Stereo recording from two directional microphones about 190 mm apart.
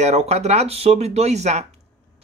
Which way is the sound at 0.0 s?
35° right (ahead or behind).